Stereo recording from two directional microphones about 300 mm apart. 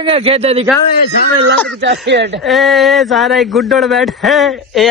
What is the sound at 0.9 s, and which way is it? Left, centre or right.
Speech, left.